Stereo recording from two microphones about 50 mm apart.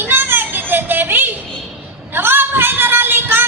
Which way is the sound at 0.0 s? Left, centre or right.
Right.